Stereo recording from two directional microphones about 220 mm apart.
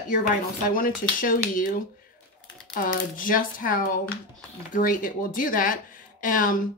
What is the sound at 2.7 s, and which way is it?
A woman's voice, 40° left (ahead or behind).